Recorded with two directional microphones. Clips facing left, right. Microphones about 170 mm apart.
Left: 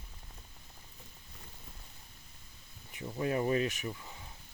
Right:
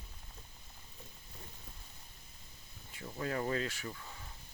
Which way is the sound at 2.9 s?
20° left (ahead or behind).